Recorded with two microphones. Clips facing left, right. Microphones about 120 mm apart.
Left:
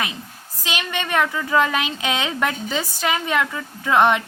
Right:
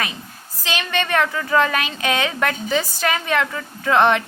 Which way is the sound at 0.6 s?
15° left (ahead or behind).